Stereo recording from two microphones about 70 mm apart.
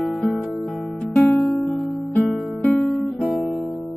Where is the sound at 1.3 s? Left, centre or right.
Centre.